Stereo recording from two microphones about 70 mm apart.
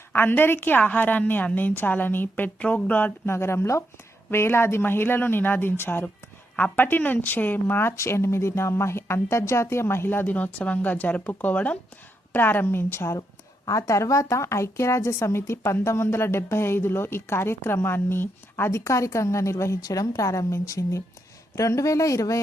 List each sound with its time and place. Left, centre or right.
0.1 s speech: left
3.2 s speech: left
13.7 s speech: left
19.8 s a woman's voice: left